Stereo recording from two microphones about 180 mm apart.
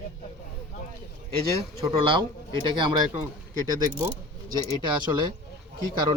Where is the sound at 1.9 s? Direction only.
30° right (ahead or behind).